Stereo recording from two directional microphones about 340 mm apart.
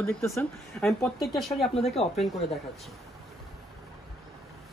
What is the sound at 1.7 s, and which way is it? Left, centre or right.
Speech, centre.